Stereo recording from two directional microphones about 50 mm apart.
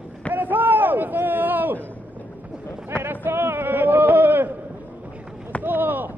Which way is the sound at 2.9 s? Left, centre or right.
Right.